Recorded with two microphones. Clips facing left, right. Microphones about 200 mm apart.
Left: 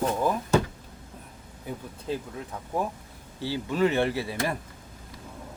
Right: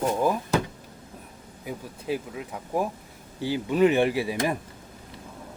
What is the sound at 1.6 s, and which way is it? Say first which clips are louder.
Speech: right 2 dB; 10° right (ahead or behind).